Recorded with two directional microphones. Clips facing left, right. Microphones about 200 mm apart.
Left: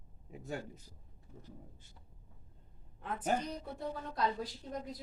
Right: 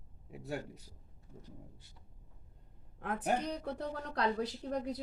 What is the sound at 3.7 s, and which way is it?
Speech, 70° right (ahead or behind).